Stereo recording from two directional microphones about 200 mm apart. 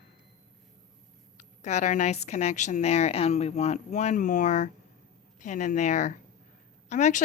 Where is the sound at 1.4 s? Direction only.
35° left (ahead or behind).